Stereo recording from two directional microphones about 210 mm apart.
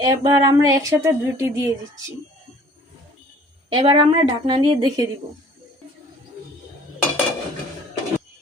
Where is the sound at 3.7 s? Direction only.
25° right (ahead or behind).